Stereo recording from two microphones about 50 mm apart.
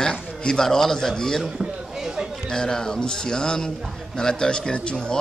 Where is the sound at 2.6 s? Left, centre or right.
Centre.